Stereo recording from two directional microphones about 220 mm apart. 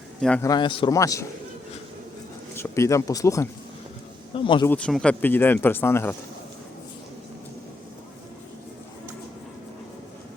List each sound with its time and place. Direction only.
0.2 s speech: 5° left (ahead or behind)
0.4 s speech: 20° left (ahead or behind)
2.6 s speech: 10° left (ahead or behind)
4.7 s speech: 5° left (ahead or behind)